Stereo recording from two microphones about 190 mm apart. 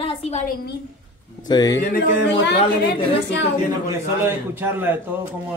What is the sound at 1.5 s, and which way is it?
Speech, 20° left (ahead or behind).